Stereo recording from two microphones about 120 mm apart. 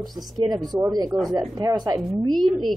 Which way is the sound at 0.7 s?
30° right (ahead or behind).